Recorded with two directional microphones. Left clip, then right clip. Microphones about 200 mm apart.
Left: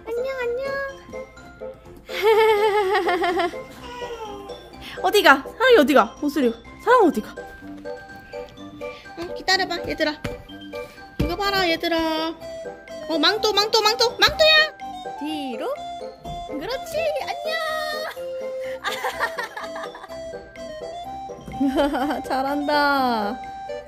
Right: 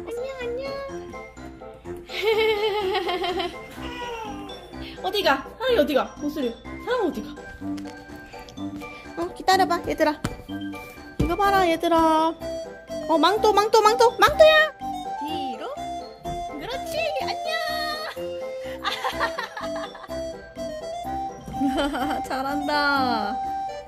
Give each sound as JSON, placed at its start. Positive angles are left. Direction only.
{"t": 0.2, "sound": "a sound", "side_deg": 25}
{"t": 2.1, "sound": "laughter", "side_deg": 25}
{"t": 5.0, "sound": "speech", "side_deg": 45}
{"t": 9.1, "sound": "music", "side_deg": -20}
{"t": 9.8, "sound": "a child's voice", "side_deg": -5}
{"t": 11.1, "sound": "music", "side_deg": -10}
{"t": 13.1, "sound": "a child's voice", "side_deg": -5}
{"t": 15.2, "sound": "music", "side_deg": 30}
{"t": 15.8, "sound": "music", "side_deg": -20}
{"t": 16.5, "sound": "music", "side_deg": 25}
{"t": 20.6, "sound": "music", "side_deg": -15}
{"t": 21.6, "sound": "speech", "side_deg": 20}